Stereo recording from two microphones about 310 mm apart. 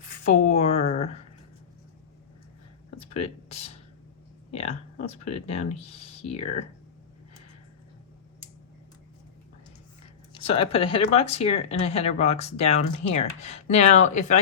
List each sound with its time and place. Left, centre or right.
0.3 s speech: left
3.0 s a sound: centre
4.5 s speech: centre
10.3 s speech: centre